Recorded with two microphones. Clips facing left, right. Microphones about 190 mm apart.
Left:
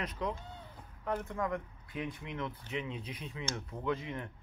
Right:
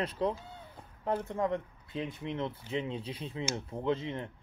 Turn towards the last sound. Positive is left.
turn(degrees=-25)  # may be behind; listen again after turning